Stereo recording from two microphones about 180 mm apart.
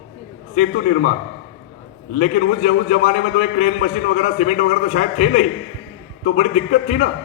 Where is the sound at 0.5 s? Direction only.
45° left (ahead or behind).